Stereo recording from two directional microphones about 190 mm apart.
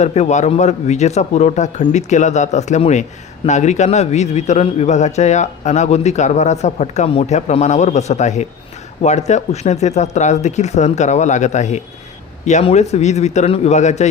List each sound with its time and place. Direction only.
0.0 s a man's voice: 35° left (ahead or behind)